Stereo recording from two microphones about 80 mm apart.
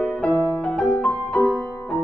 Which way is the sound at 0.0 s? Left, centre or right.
Centre.